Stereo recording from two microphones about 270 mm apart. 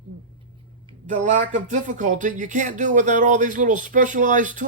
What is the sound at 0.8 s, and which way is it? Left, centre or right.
Speech, right.